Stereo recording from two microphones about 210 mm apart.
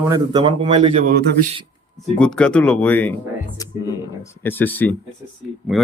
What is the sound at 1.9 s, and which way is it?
Speech, 5° left (ahead or behind).